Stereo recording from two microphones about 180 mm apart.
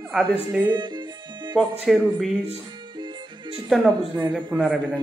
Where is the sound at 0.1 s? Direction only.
Centre (ahead or behind).